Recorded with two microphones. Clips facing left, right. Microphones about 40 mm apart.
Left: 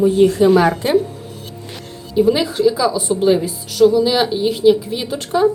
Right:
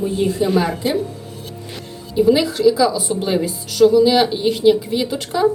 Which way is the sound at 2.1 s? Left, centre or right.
Left.